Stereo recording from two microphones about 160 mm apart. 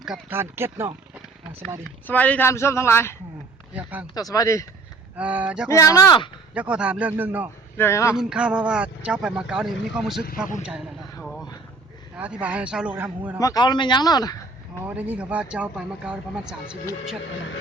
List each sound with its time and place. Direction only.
0.0 s speech: 5° right (ahead or behind)
0.3 s speech: 15° right (ahead or behind)
2.0 s a man's voice: 10° left (ahead or behind)
3.8 s speech: 10° right (ahead or behind)
4.0 s speech: 25° left (ahead or behind)
5.1 s speech: 10° right (ahead or behind)
5.6 s speech: 20° left (ahead or behind)
6.5 s speech: 10° right (ahead or behind)
7.8 s a man's voice: 15° left (ahead or behind)
8.1 s speech: 5° right (ahead or behind)
11.2 s a sound: centre (ahead or behind)
12.1 s speech: 10° right (ahead or behind)
13.4 s speech: 25° left (ahead or behind)
14.8 s speech: 10° right (ahead or behind)